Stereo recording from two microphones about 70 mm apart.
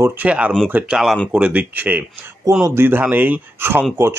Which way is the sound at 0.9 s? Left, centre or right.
Centre.